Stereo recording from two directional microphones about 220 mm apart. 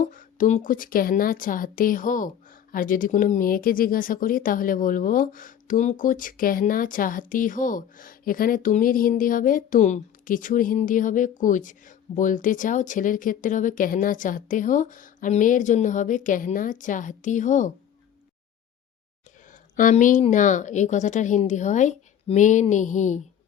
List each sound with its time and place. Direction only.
0.0 s speech: 35° left (ahead or behind)
19.7 s speech: 35° left (ahead or behind)